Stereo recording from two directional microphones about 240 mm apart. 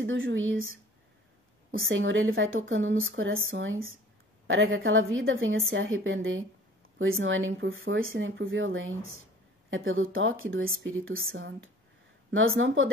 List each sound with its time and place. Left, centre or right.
0.0 s a woman's voice: right